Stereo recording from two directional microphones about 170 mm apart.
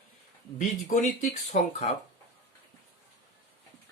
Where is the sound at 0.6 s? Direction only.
50° left (ahead or behind).